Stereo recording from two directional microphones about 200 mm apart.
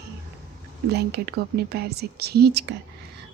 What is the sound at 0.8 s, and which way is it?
A woman's voice, 55° right (ahead or behind).